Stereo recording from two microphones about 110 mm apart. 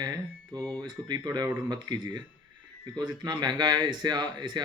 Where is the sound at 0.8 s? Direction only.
40° right (ahead or behind).